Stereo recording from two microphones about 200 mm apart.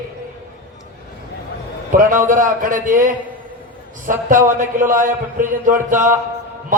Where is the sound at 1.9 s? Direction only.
40° right (ahead or behind).